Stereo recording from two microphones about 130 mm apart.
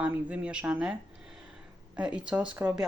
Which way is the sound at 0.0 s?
10° right (ahead or behind).